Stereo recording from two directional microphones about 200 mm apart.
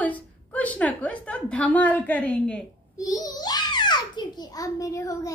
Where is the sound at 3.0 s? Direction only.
20° left (ahead or behind).